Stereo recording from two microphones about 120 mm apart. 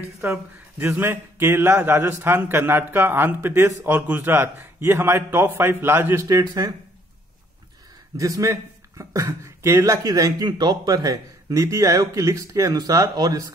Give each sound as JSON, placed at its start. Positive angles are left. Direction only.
{"t": 0.2, "sound": "a man's voice", "side_deg": -20}
{"t": 8.2, "sound": "a man's voice", "side_deg": -25}